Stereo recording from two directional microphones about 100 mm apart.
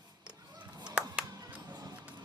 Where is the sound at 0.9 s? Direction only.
15° right (ahead or behind).